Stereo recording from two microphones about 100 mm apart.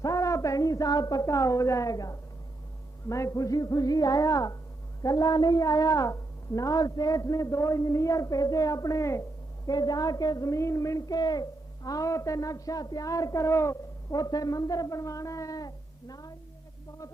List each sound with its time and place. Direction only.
0.0 s a woman's voice: 35° left (ahead or behind)
9.6 s a woman's voice: 40° left (ahead or behind)